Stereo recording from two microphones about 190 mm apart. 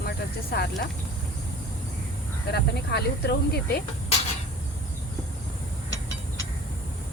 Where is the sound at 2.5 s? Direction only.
60° left (ahead or behind).